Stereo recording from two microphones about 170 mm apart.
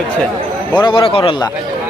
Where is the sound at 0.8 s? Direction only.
30° left (ahead or behind).